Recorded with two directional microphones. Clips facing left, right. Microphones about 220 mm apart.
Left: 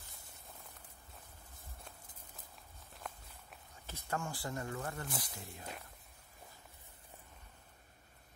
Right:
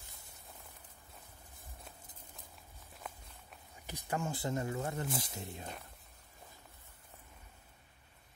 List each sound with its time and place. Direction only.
3.0 s walk: 5° right (ahead or behind)
3.7 s speech: 15° right (ahead or behind)